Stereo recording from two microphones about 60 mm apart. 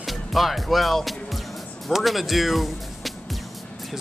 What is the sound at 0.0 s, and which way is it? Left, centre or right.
Speech, centre.